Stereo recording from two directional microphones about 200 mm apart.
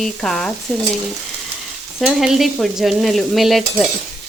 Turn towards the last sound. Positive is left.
turn(degrees=0)  # may be behind; listen again after turning